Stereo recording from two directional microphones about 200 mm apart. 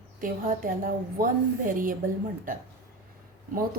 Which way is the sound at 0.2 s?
45° right (ahead or behind).